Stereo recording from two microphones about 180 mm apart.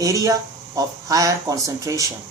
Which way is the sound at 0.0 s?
20° right (ahead or behind).